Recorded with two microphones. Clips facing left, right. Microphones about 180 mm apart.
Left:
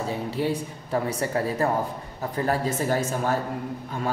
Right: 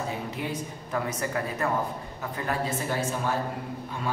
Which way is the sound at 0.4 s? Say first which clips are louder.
Left 6 dB; 30° left (ahead or behind).